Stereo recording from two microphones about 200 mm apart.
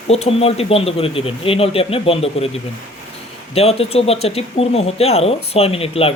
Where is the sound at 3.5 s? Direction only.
30° left (ahead or behind).